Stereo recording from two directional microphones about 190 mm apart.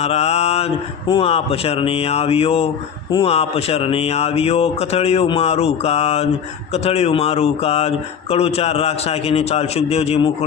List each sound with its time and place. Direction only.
0.0 s speech: 35° left (ahead or behind)